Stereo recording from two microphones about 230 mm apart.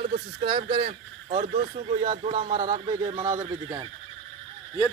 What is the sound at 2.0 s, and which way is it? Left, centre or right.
Speech, centre.